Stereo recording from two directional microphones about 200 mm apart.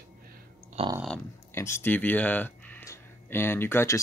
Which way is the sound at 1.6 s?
15° left (ahead or behind).